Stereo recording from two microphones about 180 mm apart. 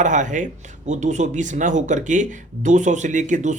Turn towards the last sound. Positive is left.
turn(degrees=-40)  # may be behind; listen again after turning